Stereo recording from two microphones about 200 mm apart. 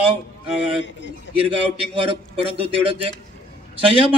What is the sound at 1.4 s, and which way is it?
A man's voice, 25° right (ahead or behind).